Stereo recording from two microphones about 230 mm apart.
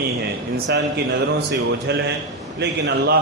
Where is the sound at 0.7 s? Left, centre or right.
Right.